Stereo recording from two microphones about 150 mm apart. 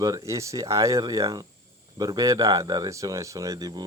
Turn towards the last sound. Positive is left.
turn(degrees=-25)  # may be behind; listen again after turning